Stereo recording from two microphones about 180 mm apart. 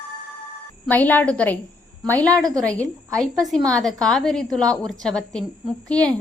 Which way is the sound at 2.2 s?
20° right (ahead or behind).